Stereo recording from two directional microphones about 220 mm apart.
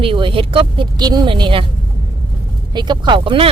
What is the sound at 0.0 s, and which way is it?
Speech, 25° right (ahead or behind).